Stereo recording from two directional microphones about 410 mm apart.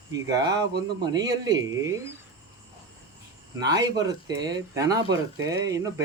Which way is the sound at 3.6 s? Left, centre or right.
Centre.